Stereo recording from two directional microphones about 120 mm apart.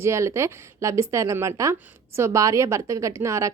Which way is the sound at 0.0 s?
25° right (ahead or behind).